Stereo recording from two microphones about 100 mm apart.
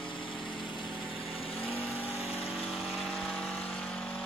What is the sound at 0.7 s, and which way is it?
Engine, 55° left (ahead or behind).